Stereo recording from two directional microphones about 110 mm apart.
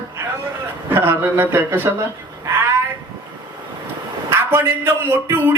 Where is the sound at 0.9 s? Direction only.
20° right (ahead or behind).